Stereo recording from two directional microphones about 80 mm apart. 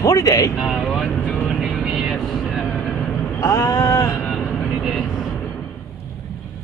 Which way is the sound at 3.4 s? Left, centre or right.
Left.